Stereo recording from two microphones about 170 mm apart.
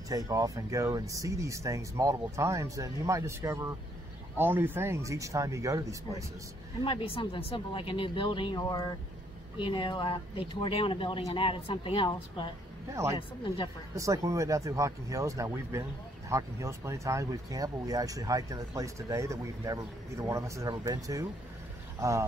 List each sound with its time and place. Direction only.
0.1 s speech: 20° right (ahead or behind)
6.8 s speech: 30° left (ahead or behind)
13.9 s speech: 20° right (ahead or behind)